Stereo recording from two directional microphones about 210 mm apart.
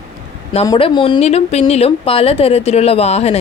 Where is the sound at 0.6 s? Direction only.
25° left (ahead or behind).